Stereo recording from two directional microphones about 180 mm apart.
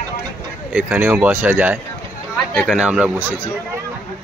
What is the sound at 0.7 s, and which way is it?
Speech, 10° right (ahead or behind).